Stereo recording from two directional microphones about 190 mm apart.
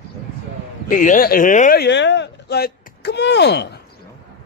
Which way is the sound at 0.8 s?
45° left (ahead or behind).